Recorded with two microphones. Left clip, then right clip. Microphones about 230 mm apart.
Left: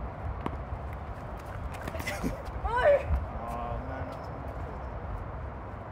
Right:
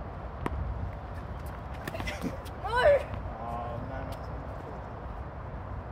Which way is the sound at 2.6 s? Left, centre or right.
Right.